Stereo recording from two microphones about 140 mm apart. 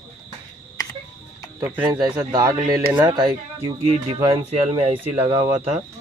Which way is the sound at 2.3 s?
30° right (ahead or behind).